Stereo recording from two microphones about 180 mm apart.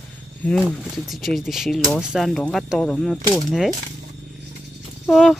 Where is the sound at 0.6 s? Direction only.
5° right (ahead or behind).